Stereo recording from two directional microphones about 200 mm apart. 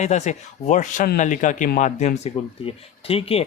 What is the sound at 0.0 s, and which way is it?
Speech, 35° left (ahead or behind).